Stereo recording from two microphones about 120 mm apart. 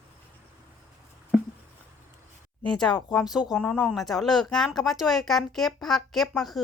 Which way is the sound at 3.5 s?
10° left (ahead or behind).